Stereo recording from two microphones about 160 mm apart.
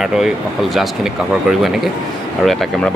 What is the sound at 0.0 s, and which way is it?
Speech, centre (ahead or behind).